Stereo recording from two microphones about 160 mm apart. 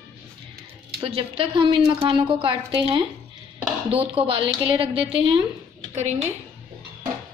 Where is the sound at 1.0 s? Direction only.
35° right (ahead or behind).